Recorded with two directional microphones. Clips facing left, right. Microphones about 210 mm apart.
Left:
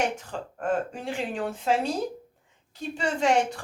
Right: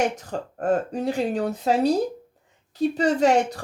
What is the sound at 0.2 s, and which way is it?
A woman's voice, 40° right (ahead or behind).